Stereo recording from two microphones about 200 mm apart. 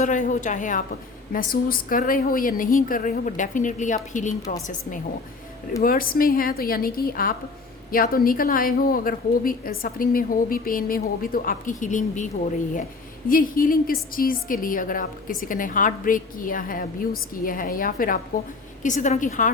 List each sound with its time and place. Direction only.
0.0 s a woman's voice: 40° left (ahead or behind)